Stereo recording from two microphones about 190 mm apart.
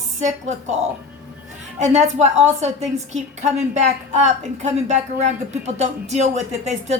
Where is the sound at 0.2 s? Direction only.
40° right (ahead or behind).